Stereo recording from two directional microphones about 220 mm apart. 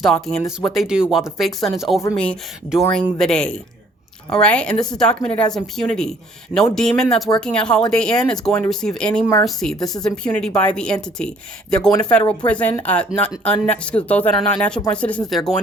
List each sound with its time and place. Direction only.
0.0 s speech: centre (ahead or behind)
2.0 s speech: 10° left (ahead or behind)
9.7 s speech: 15° left (ahead or behind)
10.4 s speech: 5° left (ahead or behind)
11.9 s speech: 15° left (ahead or behind)
12.5 s speech: 5° left (ahead or behind)